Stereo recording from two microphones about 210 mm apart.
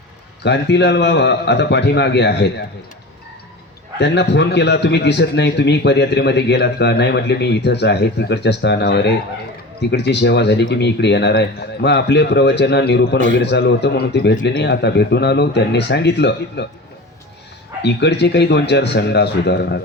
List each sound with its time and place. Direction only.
0.4 s a man's voice: 55° left (ahead or behind)
3.9 s a man's voice: 55° left (ahead or behind)
17.8 s a man's voice: 55° left (ahead or behind)